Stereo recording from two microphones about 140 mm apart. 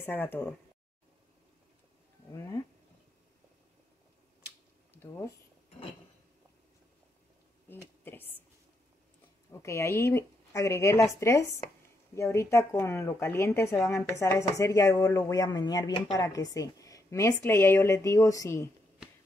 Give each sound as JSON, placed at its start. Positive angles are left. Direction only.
{"t": 0.0, "sound": "speech", "side_deg": 15}
{"t": 2.3, "sound": "speech", "side_deg": 20}
{"t": 4.9, "sound": "speech", "side_deg": 15}
{"t": 7.6, "sound": "speech", "side_deg": 15}
{"t": 9.5, "sound": "speech", "side_deg": 20}